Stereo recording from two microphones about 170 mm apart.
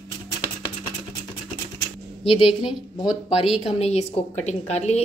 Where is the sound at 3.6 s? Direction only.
40° left (ahead or behind).